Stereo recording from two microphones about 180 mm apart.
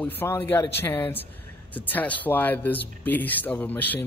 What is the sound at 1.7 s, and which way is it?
Speech, 10° left (ahead or behind).